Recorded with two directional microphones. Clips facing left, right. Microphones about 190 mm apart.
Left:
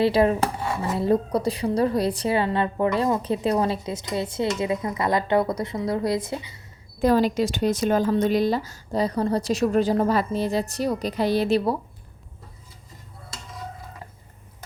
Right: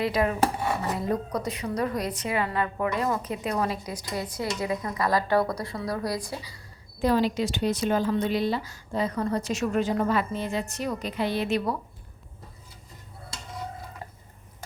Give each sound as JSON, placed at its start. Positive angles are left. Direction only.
{"t": 0.0, "sound": "a woman's voice", "side_deg": 30}
{"t": 7.0, "sound": "a woman's voice", "side_deg": 45}